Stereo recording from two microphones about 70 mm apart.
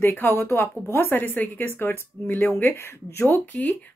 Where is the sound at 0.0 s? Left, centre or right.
Left.